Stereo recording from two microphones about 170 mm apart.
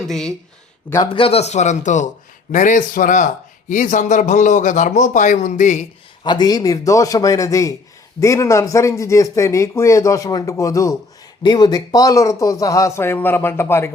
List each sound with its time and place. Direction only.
0.1 s speech: 5° left (ahead or behind)
1.0 s speech: 30° left (ahead or behind)
6.2 s speech: 25° left (ahead or behind)